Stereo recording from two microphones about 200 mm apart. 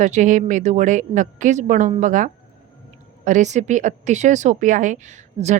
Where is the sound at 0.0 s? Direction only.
40° right (ahead or behind).